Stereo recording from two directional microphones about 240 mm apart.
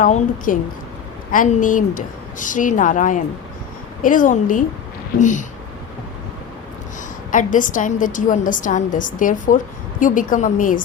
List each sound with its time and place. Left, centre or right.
0.0 s a woman's voice: left
7.3 s a woman's voice: left